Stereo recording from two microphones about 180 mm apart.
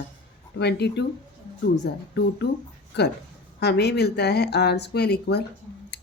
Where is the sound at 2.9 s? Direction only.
70° left (ahead or behind).